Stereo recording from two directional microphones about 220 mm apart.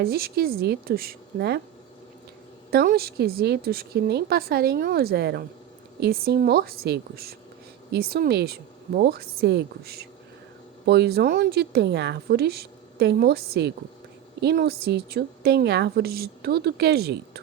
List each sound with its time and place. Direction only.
0.0 s a woman's voice: 45° right (ahead or behind)
2.6 s a woman's voice: 45° right (ahead or behind)